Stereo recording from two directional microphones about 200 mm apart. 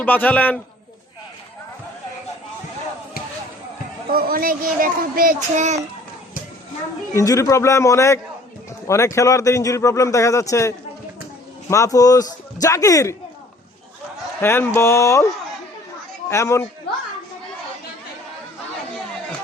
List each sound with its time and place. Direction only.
0.0 s speech: 10° left (ahead or behind)
4.1 s speech: 45° right (ahead or behind)
7.1 s speech: 15° left (ahead or behind)
14.4 s speech: 10° left (ahead or behind)
16.3 s speech: 15° left (ahead or behind)